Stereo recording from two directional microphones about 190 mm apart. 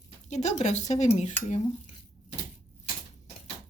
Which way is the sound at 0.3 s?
40° left (ahead or behind).